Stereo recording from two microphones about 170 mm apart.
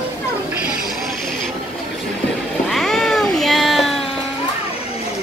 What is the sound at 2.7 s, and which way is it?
Cat, centre (ahead or behind).